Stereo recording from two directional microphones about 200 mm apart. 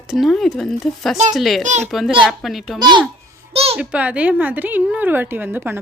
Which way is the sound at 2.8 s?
20° right (ahead or behind).